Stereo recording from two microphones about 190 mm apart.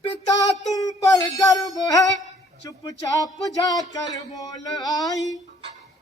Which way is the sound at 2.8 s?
20° left (ahead or behind).